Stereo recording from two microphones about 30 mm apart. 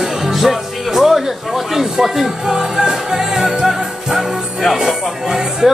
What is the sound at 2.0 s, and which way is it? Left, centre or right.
A woman's voice, centre.